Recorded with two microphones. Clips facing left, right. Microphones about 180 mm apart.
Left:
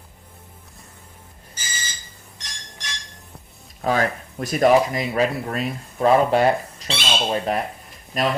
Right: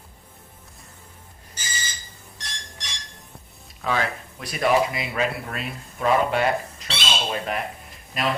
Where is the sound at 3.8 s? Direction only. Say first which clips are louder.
Left 4 dB; 45° left (ahead or behind).